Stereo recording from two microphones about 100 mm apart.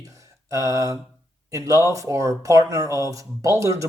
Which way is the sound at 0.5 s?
35° right (ahead or behind).